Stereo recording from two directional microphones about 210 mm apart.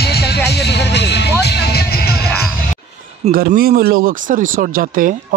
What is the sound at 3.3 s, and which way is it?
Speech, 45° right (ahead or behind).